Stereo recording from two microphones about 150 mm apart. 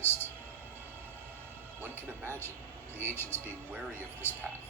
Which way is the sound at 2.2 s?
15° left (ahead or behind).